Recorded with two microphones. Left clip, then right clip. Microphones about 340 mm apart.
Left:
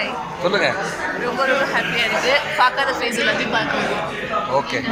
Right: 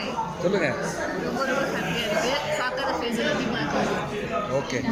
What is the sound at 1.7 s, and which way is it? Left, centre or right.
Speech, centre.